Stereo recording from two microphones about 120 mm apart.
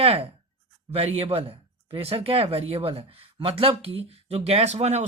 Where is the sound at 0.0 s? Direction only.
50° right (ahead or behind).